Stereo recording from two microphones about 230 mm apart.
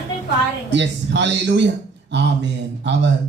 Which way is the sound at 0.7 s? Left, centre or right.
Right.